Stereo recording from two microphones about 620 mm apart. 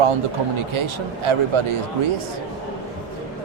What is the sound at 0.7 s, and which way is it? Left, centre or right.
Speech, right.